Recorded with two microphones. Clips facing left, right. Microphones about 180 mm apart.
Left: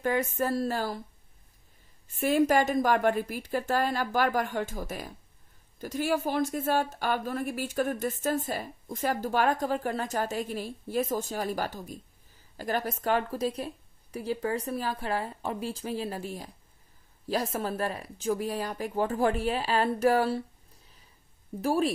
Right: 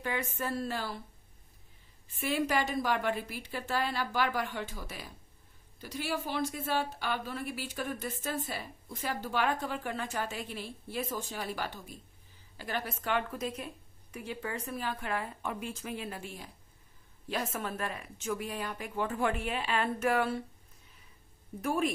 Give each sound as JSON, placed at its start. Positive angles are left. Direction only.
{"t": 0.0, "sound": "speech", "side_deg": 40}
{"t": 2.0, "sound": "a woman's voice", "side_deg": 45}